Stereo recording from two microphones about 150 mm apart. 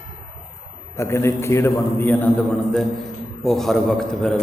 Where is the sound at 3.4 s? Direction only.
Centre (ahead or behind).